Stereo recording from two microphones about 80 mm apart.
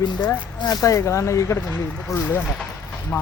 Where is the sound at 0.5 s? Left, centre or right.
Left.